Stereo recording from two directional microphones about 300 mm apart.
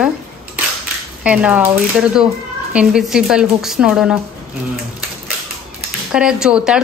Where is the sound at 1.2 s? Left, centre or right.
Centre.